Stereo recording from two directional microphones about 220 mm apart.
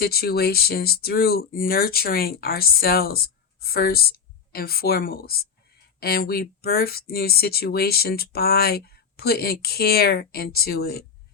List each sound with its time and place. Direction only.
0.0 s speech: 45° left (ahead or behind)